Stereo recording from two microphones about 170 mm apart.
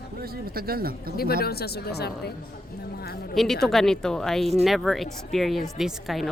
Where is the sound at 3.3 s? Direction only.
Centre (ahead or behind).